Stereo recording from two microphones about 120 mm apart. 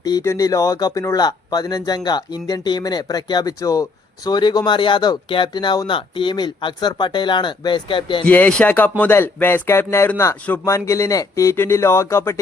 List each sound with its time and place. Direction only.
0.0 s speech: 30° left (ahead or behind)
8.2 s speech: 15° left (ahead or behind)